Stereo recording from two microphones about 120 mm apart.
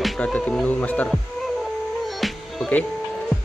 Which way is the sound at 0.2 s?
10° left (ahead or behind).